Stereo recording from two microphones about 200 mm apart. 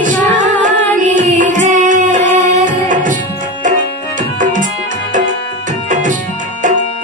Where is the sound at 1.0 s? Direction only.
40° right (ahead or behind).